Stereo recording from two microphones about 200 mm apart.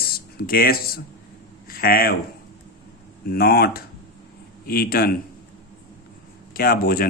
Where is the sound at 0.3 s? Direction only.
50° left (ahead or behind).